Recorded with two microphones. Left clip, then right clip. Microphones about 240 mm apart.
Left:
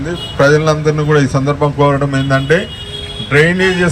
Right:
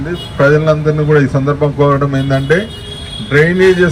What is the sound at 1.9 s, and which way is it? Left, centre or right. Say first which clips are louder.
A man's voice: even; centre.